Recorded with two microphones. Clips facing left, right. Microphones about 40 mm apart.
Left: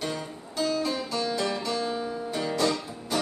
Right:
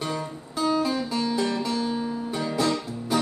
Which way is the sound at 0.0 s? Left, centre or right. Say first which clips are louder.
Right 3 dB; centre.